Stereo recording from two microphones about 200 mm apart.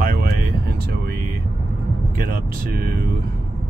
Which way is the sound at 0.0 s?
45° right (ahead or behind).